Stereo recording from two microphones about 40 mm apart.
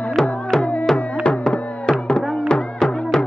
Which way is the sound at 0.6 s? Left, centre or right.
Left.